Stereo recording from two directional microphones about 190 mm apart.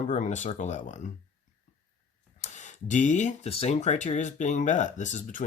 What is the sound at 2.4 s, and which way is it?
Speech, 40° left (ahead or behind).